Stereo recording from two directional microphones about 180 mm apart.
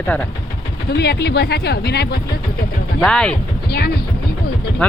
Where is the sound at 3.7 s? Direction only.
60° left (ahead or behind).